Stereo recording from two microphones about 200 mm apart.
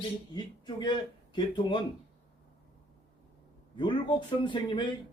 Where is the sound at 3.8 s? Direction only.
25° left (ahead or behind).